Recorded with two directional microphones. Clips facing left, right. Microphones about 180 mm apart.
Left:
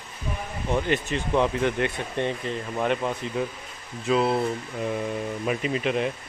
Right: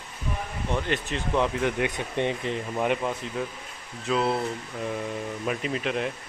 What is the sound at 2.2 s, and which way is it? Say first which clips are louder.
Speech: right 1 dB; 15° right (ahead or behind).